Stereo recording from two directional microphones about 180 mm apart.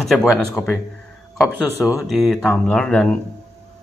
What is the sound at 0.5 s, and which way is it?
Speech, 20° left (ahead or behind).